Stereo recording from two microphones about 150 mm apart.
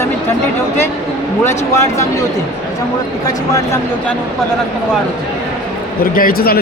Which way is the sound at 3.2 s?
20° left (ahead or behind).